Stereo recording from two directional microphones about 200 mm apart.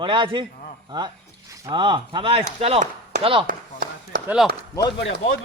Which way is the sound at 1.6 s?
25° right (ahead or behind).